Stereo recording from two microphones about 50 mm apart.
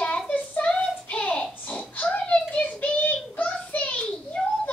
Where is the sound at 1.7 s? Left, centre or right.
Left.